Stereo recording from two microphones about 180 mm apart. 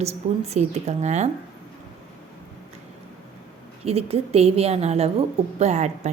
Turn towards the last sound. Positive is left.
turn(degrees=-40)  # may be behind; listen again after turning